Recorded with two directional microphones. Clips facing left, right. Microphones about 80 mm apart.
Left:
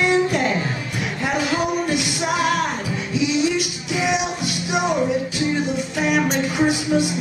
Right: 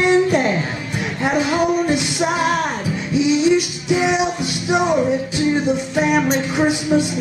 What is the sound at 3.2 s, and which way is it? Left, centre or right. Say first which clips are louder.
Music: right 5 dB; right.